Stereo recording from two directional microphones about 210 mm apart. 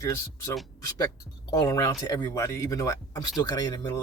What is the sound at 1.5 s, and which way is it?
Speech, 15° left (ahead or behind).